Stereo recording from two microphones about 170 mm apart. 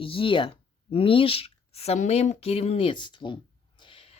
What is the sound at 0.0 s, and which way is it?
Speech, 30° left (ahead or behind).